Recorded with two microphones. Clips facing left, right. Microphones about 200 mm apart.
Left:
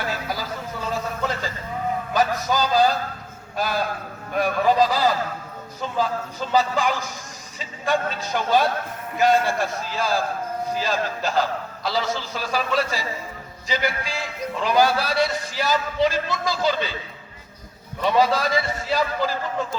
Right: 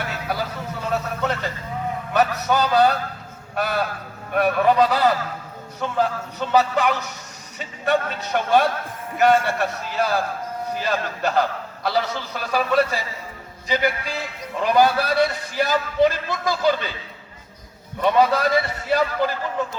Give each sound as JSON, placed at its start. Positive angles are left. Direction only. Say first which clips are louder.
{"t": 0.1, "sound": "a sound", "louder": "right 1 dB", "side_deg": -65}
{"t": 3.5, "sound": "a man's voice", "louder": "right 1 dB", "side_deg": -65}
{"t": 18.0, "sound": "a man's voice", "louder": "right 2 dB", "side_deg": -60}